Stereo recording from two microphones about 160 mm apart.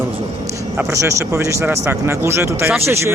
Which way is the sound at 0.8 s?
20° right (ahead or behind).